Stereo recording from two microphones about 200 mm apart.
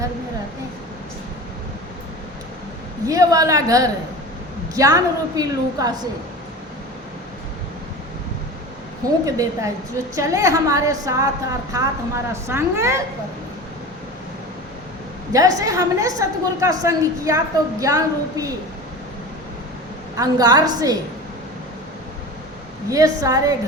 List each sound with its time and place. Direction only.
3.1 s a woman's voice: 15° right (ahead or behind)
9.2 s a woman's voice: 15° right (ahead or behind)
15.3 s a woman's voice: 15° right (ahead or behind)
20.1 s a woman's voice: 20° right (ahead or behind)
22.9 s a woman's voice: 15° right (ahead or behind)